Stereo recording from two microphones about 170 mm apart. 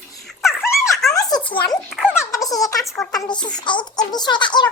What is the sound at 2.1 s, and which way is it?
A child's voice, 20° left (ahead or behind).